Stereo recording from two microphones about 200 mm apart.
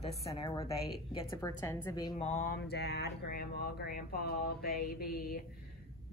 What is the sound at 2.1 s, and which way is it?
Mantra, 35° left (ahead or behind).